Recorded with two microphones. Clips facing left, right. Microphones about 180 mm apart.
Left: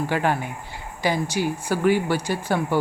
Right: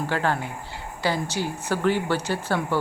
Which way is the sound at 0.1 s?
15° left (ahead or behind).